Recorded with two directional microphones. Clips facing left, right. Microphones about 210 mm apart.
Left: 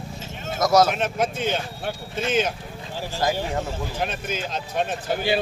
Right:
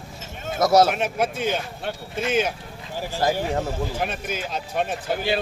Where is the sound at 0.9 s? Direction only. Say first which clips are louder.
Even; 5° right (ahead or behind).